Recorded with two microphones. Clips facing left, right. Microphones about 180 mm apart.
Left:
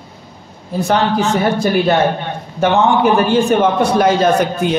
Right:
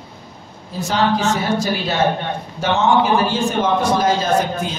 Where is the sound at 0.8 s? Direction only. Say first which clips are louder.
Left 3 dB; 60° left (ahead or behind).